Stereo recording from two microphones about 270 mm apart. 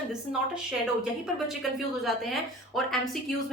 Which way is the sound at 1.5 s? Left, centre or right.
Centre.